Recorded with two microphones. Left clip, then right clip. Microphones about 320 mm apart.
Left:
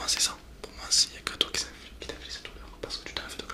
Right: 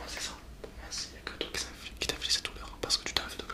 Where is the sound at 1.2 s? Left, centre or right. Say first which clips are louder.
Left 9 dB; centre.